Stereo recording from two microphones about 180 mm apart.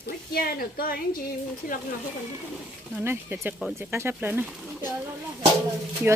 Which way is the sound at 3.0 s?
10° right (ahead or behind).